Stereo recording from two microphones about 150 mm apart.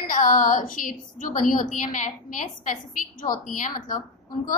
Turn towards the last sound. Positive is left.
turn(degrees=65)  # may be behind; listen again after turning